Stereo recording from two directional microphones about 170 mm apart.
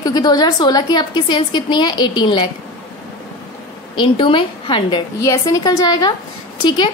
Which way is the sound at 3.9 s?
30° left (ahead or behind).